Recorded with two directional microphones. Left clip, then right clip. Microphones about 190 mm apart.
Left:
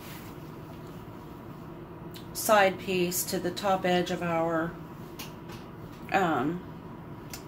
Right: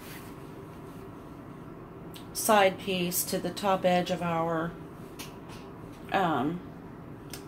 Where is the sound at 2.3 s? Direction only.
40° right (ahead or behind).